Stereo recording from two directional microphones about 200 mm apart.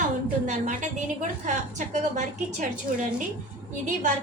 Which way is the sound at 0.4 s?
35° right (ahead or behind).